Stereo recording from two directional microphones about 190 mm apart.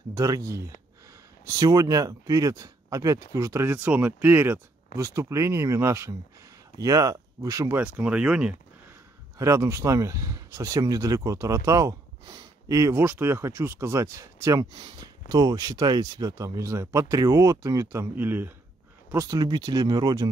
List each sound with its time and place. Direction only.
0.1 s speech: 15° right (ahead or behind)